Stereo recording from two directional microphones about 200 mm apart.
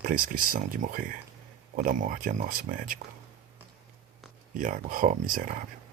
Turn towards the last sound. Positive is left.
turn(degrees=-40)  # may be behind; listen again after turning